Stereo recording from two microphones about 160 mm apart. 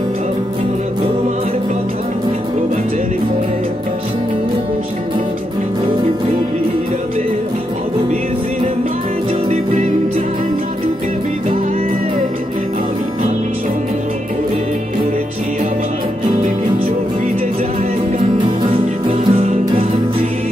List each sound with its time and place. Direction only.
19.0 s music: 40° right (ahead or behind)